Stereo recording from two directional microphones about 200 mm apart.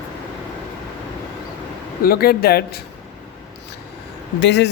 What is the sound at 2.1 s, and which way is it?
Speech, 50° left (ahead or behind).